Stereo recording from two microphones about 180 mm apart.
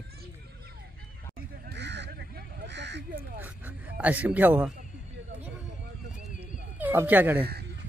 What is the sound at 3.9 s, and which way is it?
Speech, 10° right (ahead or behind).